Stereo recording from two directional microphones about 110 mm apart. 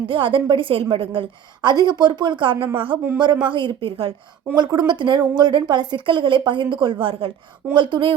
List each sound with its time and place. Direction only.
0.1 s a woman's voice: 50° right (ahead or behind)
4.5 s a woman's voice: 40° right (ahead or behind)